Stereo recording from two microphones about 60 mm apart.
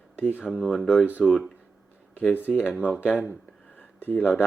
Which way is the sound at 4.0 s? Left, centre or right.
Left.